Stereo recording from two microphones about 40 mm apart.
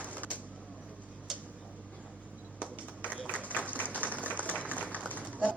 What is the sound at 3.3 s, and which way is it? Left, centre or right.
Applause, right.